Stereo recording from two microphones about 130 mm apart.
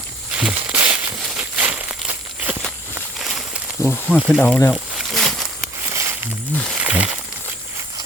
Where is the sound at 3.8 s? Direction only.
20° left (ahead or behind).